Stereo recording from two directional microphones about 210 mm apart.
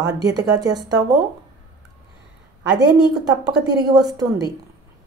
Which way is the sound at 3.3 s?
20° right (ahead or behind).